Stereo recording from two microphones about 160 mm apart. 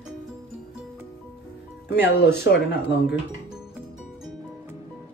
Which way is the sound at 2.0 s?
90° left.